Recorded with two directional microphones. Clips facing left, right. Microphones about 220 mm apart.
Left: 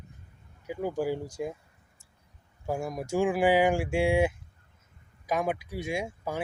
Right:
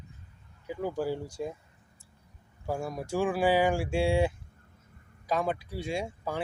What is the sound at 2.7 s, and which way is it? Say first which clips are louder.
Speech: left 2 dB; 15° left (ahead or behind).